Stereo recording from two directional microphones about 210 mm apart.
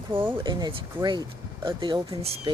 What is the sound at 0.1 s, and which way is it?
Speech, 10° right (ahead or behind).